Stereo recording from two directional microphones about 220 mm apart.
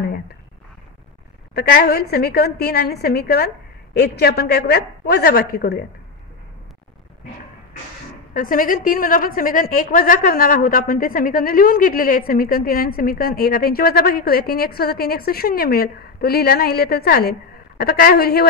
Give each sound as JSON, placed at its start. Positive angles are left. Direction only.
{"t": 1.5, "sound": "a woman's voice", "side_deg": 45}
{"t": 8.3, "sound": "a woman's voice", "side_deg": 40}